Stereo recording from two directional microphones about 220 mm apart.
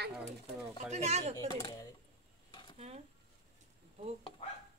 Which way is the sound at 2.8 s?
30° right (ahead or behind).